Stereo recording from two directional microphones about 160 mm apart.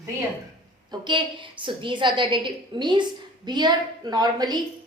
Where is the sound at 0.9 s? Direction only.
30° right (ahead or behind).